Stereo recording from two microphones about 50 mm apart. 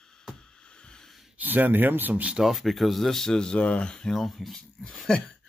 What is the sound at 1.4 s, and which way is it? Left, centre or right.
Speech, right.